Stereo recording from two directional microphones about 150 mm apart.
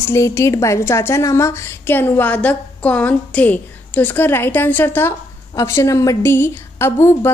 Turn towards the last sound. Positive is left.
turn(degrees=15)  # may be behind; listen again after turning